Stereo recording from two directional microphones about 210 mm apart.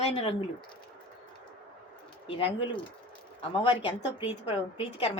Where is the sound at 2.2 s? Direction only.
25° left (ahead or behind).